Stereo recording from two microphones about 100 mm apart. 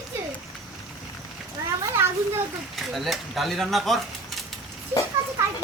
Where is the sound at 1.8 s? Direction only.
25° right (ahead or behind).